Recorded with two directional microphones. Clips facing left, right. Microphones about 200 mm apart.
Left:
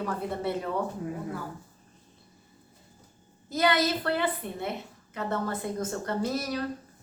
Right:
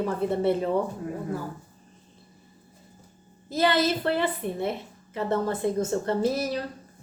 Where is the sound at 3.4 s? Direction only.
25° right (ahead or behind).